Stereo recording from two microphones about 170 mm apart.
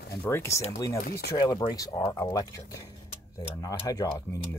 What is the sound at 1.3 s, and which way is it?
Speech, 20° left (ahead or behind).